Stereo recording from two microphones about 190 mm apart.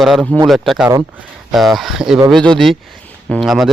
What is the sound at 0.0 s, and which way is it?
Speech, centre (ahead or behind).